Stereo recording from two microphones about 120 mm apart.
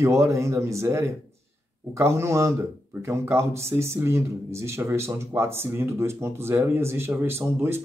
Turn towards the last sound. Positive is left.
turn(degrees=-20)  # may be behind; listen again after turning